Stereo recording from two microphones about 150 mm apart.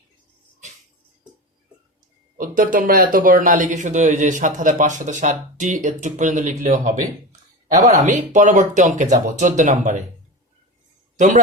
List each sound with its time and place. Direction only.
2.4 s speech: 65° right (ahead or behind)